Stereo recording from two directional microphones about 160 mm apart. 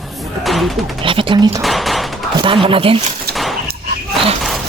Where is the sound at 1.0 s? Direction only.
30° right (ahead or behind).